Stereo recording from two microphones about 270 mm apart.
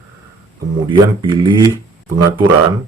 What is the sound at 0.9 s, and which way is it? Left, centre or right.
Speech, centre.